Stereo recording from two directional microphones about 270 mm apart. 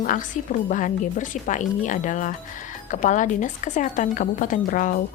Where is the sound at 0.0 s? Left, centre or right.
Left.